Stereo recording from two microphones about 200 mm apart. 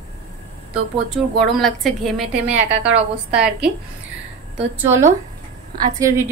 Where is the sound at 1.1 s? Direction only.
Centre (ahead or behind).